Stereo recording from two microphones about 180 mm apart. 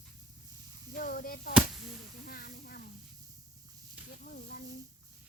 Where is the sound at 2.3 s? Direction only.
55° left (ahead or behind).